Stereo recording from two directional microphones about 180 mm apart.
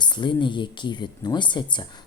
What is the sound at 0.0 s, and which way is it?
Speech, 25° left (ahead or behind).